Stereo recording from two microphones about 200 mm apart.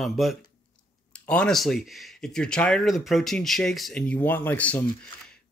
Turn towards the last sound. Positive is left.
turn(degrees=10)  # may be behind; listen again after turning